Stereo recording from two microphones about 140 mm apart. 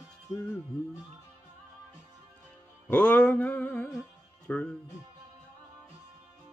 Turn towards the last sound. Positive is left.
turn(degrees=10)  # may be behind; listen again after turning